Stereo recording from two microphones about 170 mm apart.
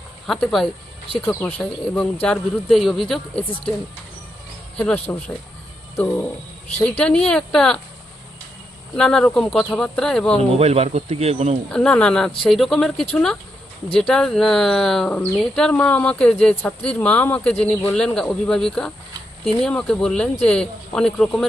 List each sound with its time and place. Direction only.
0.3 s speech: 5° left (ahead or behind)
4.8 s speech: 5° left (ahead or behind)
6.7 s speech: 10° left (ahead or behind)
9.0 s speech: 5° left (ahead or behind)
10.6 s speech: 40° right (ahead or behind)
11.7 s speech: 5° left (ahead or behind)